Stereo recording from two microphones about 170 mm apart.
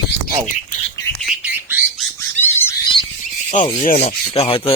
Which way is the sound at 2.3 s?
15° left (ahead or behind).